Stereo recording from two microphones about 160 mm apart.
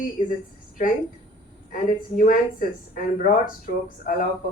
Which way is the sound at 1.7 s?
55° left (ahead or behind).